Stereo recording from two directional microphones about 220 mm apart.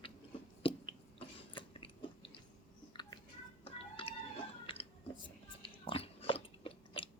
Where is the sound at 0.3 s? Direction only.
25° left (ahead or behind).